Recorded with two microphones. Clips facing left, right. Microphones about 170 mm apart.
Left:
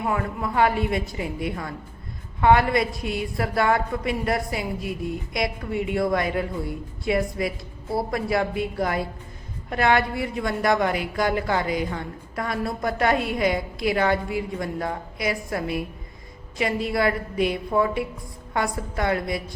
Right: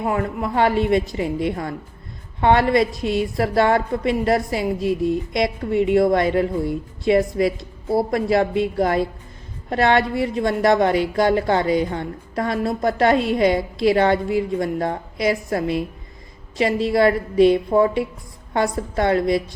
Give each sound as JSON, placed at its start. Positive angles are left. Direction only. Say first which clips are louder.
{"t": 0.0, "sound": "a woman's voice", "louder": "right 4 dB", "side_deg": -35}